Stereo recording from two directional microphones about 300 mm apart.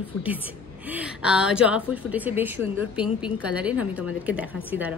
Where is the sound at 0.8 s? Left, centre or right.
Centre.